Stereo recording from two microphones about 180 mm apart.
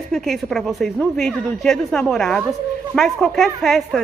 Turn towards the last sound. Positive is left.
turn(degrees=0)  # may be behind; listen again after turning